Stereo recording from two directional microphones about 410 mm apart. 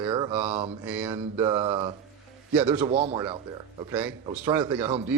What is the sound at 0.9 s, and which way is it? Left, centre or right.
Mantra, centre.